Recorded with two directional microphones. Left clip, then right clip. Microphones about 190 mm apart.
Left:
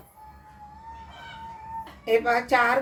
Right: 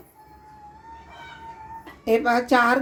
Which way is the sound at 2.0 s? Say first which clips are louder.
Right 2 dB; 35° right (ahead or behind).